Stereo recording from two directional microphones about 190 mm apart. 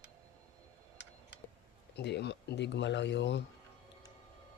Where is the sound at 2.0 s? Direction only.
60° left (ahead or behind).